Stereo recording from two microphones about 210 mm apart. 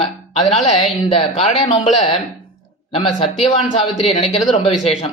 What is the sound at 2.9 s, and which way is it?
Speech, 30° left (ahead or behind).